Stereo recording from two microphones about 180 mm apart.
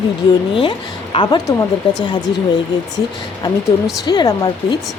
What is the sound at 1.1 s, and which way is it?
A woman's voice, 25° left (ahead or behind).